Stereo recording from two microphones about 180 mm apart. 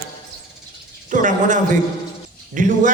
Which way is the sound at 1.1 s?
45° right (ahead or behind).